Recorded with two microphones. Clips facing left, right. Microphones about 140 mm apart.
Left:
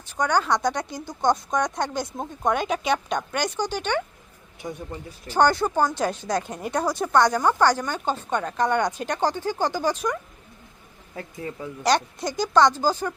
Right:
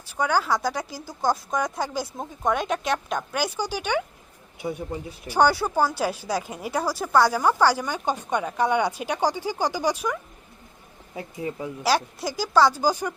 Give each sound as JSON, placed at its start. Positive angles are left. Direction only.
{"t": 0.0, "sound": "speech", "side_deg": -10}
{"t": 11.8, "sound": "speech", "side_deg": -5}